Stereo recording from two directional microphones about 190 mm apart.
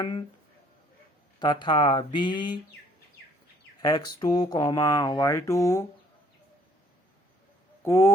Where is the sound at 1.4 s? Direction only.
25° left (ahead or behind).